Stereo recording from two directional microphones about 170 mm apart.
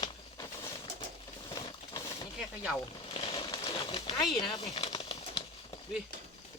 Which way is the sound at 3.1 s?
30° left (ahead or behind).